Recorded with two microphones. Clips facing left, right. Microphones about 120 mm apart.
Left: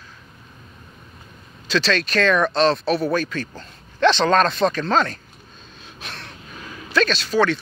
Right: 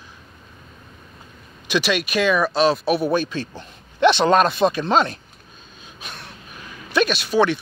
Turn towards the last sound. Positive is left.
turn(degrees=-15)  # may be behind; listen again after turning